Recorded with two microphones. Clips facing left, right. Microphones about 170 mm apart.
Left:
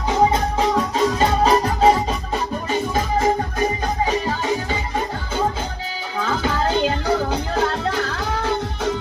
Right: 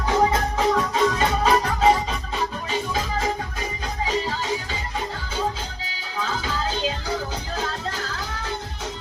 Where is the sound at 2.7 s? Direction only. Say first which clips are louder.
Left 5 dB; 50° left (ahead or behind).